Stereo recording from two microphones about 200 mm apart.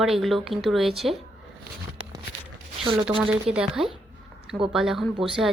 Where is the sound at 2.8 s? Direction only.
25° right (ahead or behind).